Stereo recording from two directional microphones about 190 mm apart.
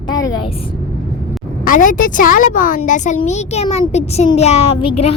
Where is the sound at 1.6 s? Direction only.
45° left (ahead or behind).